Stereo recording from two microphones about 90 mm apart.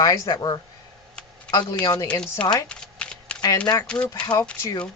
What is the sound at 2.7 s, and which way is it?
Typewriter, 10° left (ahead or behind).